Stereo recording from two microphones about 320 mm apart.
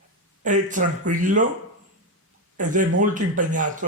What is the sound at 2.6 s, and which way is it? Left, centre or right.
Speech, right.